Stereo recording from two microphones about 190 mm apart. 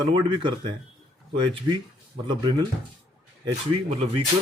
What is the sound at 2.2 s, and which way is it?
Speech, 25° right (ahead or behind).